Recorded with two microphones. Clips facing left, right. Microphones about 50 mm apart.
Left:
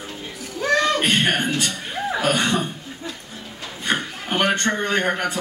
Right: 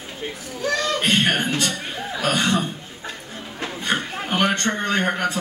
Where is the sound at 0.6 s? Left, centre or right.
Left.